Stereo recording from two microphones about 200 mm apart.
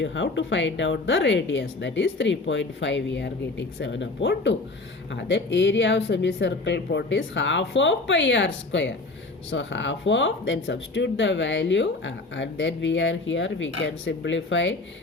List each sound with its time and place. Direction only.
0.0 s speech: 65° left (ahead or behind)